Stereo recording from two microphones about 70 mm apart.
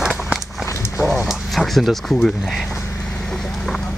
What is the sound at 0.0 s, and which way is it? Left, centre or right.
Run, centre.